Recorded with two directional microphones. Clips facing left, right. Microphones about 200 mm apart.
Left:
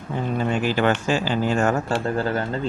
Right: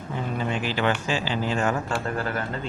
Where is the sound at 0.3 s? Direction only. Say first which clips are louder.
Left 6 dB; 45° left (ahead or behind).